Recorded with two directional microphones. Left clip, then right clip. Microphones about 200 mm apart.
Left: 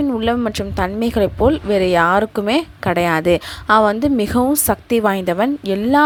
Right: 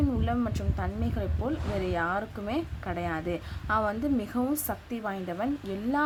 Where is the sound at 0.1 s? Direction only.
45° left (ahead or behind).